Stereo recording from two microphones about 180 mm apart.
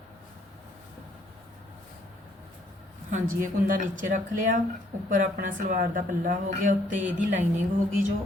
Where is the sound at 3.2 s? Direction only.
45° right (ahead or behind).